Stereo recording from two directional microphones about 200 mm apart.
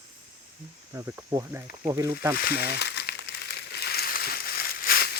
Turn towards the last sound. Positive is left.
turn(degrees=50)  # may be behind; listen again after turning